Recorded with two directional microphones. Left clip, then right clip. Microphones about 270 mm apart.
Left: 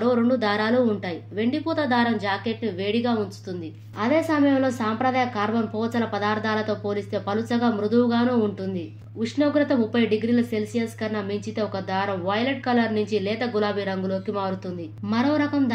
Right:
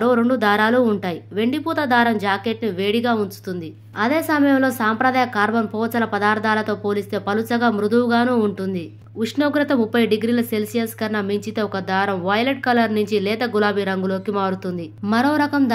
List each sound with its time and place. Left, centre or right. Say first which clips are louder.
0.0 s speech: right 4 dB; right